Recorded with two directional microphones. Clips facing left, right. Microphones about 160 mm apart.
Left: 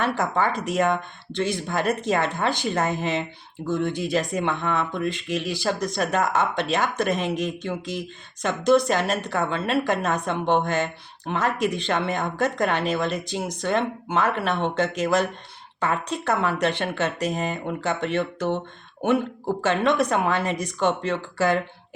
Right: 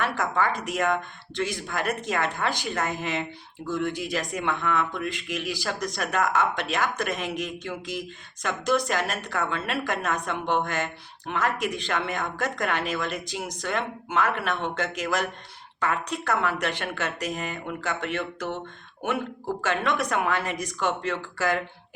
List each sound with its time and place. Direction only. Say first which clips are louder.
0.0 s speech: left 3 dB; 25° left (ahead or behind)